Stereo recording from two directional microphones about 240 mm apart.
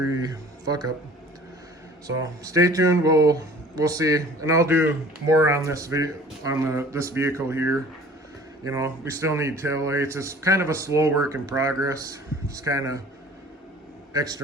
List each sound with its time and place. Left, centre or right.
0.0 s speech: centre
2.0 s speech: centre
14.1 s speech: centre